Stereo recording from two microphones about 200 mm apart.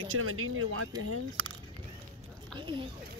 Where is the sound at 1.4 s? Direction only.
90° right.